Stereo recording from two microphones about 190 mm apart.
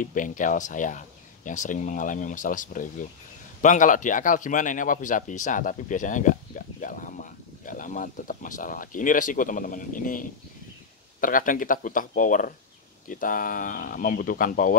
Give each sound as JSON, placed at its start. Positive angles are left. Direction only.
{"t": 0.0, "sound": "speech", "side_deg": 45}